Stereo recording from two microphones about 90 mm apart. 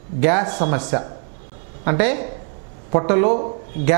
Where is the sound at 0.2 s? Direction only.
15° right (ahead or behind).